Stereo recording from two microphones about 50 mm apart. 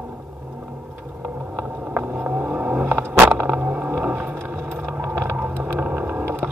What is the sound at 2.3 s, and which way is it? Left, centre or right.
Vehicle, right.